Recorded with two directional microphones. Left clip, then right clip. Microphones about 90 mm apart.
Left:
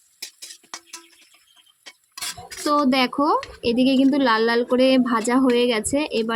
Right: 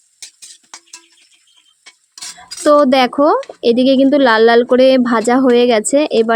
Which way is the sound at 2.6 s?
40° right (ahead or behind).